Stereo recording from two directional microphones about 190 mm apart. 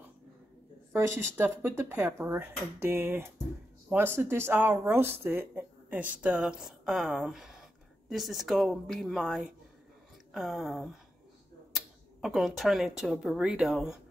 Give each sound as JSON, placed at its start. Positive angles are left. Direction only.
{"t": 0.9, "sound": "a woman's voice", "side_deg": -10}